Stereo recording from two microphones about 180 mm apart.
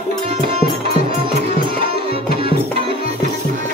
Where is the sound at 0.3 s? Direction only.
35° right (ahead or behind).